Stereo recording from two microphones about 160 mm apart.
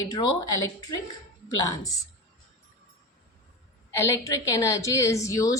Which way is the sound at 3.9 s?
15° left (ahead or behind).